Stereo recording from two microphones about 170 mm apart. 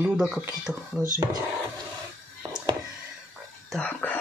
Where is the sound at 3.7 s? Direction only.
5° left (ahead or behind).